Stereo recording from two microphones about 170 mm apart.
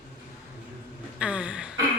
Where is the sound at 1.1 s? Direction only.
5° right (ahead or behind).